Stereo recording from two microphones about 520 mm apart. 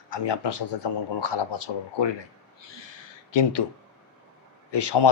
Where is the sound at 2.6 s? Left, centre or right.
Left.